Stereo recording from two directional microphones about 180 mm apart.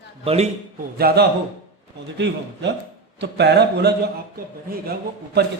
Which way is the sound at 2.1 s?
75° right (ahead or behind).